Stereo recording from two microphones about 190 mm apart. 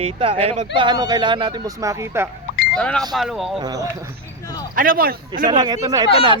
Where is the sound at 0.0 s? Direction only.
30° right (ahead or behind).